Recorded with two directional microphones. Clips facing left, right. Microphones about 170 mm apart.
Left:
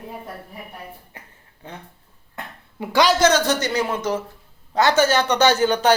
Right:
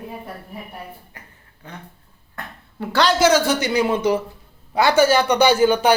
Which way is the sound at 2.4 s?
10° left (ahead or behind).